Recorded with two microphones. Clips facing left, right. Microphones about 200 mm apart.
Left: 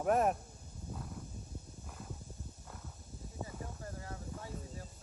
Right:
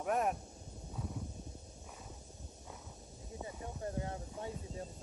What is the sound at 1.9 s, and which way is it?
Clip-clop, centre (ahead or behind).